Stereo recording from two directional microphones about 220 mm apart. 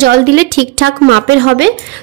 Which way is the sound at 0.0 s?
45° right (ahead or behind).